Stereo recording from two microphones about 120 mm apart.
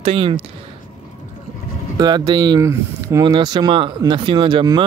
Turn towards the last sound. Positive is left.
turn(degrees=-40)  # may be behind; listen again after turning